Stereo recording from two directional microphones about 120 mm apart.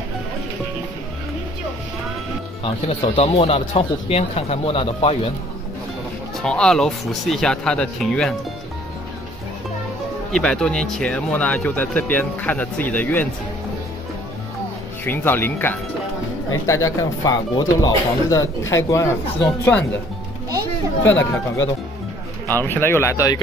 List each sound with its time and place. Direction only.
2.6 s speech: 60° left (ahead or behind)
6.4 s speech: 5° left (ahead or behind)
10.3 s speech: 5° left (ahead or behind)
15.0 s speech: 15° left (ahead or behind)
16.6 s speech: 30° left (ahead or behind)
22.5 s speech: 20° left (ahead or behind)